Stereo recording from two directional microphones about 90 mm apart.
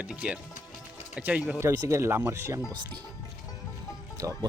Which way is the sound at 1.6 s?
35° right (ahead or behind).